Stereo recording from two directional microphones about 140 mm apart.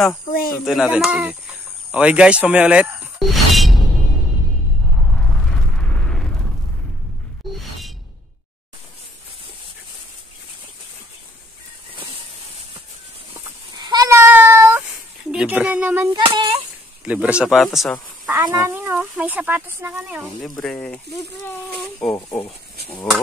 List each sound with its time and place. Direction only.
0.7 s speech: 5° right (ahead or behind)
4.9 s a sound: 5° left (ahead or behind)
11.9 s vehicle: 40° right (ahead or behind)
13.7 s child singing: 30° right (ahead or behind)
15.3 s speech: 10° right (ahead or behind)
16.2 s a sound: 40° right (ahead or behind)
17.0 s speech: 10° right (ahead or behind)
18.3 s speech: 25° right (ahead or behind)
20.4 s speech: 5° left (ahead or behind)
22.0 s speech: 10° left (ahead or behind)